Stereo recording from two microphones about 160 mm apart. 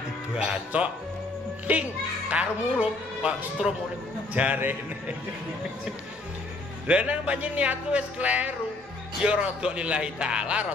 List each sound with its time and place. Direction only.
0.3 s a man's voice: 5° right (ahead or behind)
6.9 s a man's voice: 10° right (ahead or behind)